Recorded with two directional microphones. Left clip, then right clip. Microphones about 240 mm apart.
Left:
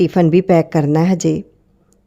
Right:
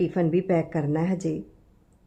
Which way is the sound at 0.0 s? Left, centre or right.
Left.